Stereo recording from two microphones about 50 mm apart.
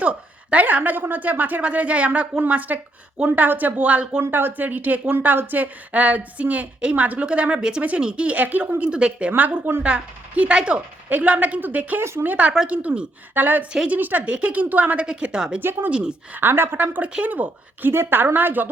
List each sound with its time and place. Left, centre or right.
0.0 s a woman's voice: right
4.2 s a woman's voice: right
8.8 s a woman's voice: centre
11.9 s speech: right
12.6 s a woman's voice: right
13.3 s a woman's voice: right
15.0 s a woman's voice: centre
16.4 s speech: right
16.8 s a woman's voice: right
17.9 s a woman's voice: right